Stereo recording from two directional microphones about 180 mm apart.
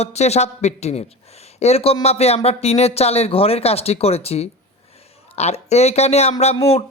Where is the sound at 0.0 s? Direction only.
35° left (ahead or behind).